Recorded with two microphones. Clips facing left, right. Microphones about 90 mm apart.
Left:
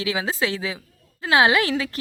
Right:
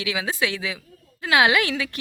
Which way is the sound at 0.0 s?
35° left (ahead or behind).